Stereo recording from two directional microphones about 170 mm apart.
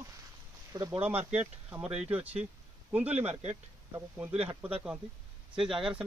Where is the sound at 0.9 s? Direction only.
35° right (ahead or behind).